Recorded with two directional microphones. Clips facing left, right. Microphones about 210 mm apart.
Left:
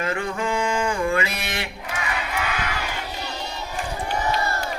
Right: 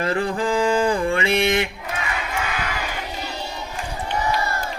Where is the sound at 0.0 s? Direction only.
35° right (ahead or behind).